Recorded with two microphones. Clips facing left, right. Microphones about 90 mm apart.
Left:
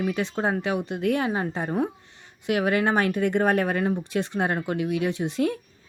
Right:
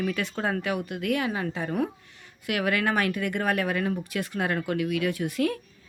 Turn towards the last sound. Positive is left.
turn(degrees=25)  # may be behind; listen again after turning